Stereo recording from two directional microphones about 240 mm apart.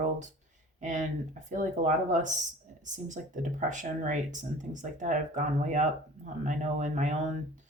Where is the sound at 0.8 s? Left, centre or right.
Right.